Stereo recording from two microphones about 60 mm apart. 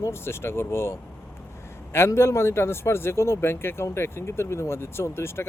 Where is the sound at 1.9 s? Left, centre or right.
Left.